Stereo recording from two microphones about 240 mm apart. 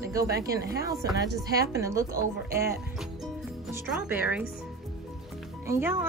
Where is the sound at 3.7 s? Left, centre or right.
Centre.